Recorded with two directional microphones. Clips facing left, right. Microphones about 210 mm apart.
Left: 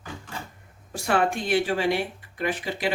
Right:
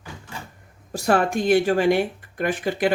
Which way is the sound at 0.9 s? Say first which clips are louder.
Right 3 dB; 40° right (ahead or behind).